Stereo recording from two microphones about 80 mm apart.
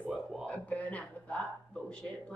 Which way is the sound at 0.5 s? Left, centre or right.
Centre.